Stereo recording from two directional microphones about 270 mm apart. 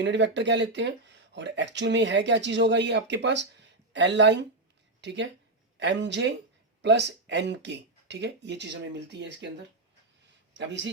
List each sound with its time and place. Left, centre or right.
0.0 s speech: right
10.5 s a man's voice: right